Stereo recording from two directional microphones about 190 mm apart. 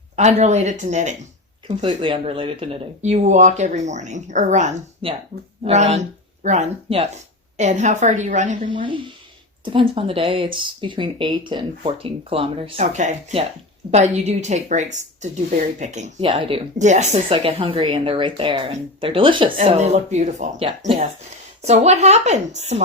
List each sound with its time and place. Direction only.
0.2 s speech: 35° right (ahead or behind)
8.6 s speech: 25° right (ahead or behind)
16.3 s speech: 25° right (ahead or behind)
16.7 s speech: 40° right (ahead or behind)